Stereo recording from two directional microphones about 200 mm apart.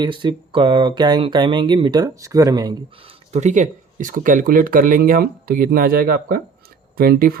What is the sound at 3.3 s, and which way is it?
Speech, 35° right (ahead or behind).